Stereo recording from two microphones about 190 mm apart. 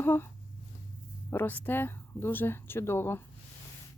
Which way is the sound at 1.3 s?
10° left (ahead or behind).